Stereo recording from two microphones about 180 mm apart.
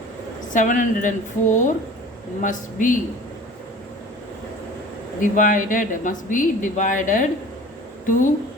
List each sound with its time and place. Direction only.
0.5 s speech: 45° left (ahead or behind)
5.2 s speech: 45° left (ahead or behind)